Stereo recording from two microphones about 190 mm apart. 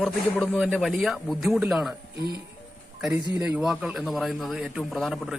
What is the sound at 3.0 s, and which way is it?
Speech, 10° right (ahead or behind).